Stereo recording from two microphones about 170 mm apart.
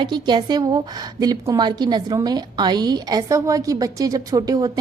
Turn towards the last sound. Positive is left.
turn(degrees=-20)  # may be behind; listen again after turning